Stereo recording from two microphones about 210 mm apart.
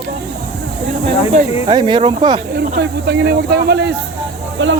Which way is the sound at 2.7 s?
50° right (ahead or behind).